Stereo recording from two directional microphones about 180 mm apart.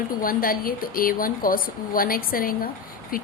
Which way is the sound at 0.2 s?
55° left (ahead or behind).